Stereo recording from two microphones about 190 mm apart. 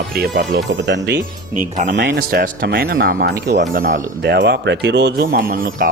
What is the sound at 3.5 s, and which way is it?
Speech, 45° right (ahead or behind).